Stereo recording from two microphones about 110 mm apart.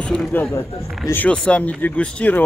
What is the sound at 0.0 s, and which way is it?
Speech, 10° left (ahead or behind).